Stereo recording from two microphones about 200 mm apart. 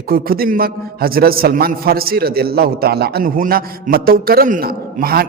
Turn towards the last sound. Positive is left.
turn(degrees=-50)  # may be behind; listen again after turning